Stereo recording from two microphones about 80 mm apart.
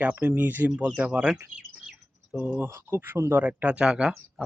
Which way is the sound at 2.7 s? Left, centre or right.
Right.